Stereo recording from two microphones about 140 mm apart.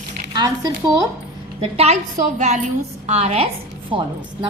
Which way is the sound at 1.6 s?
50° right (ahead or behind).